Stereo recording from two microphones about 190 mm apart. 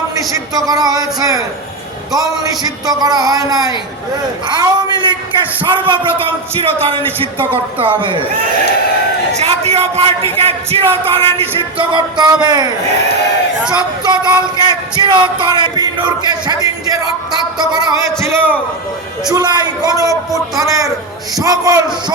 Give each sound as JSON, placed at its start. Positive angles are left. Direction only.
{"t": 0.3, "sound": "speech", "side_deg": -20}
{"t": 2.8, "sound": "speech", "side_deg": -20}
{"t": 9.4, "sound": "speech", "side_deg": -35}
{"t": 13.7, "sound": "a man's voice", "side_deg": -20}